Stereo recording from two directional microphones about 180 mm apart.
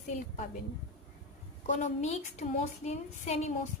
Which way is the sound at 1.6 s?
40° left (ahead or behind).